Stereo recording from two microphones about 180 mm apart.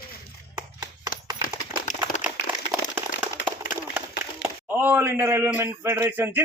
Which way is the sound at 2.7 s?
15° right (ahead or behind).